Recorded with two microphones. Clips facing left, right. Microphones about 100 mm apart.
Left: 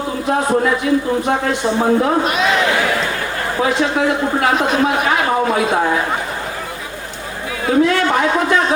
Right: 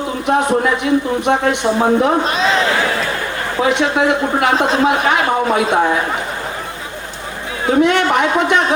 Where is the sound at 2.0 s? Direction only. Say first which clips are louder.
Right 1 dB; 30° right (ahead or behind).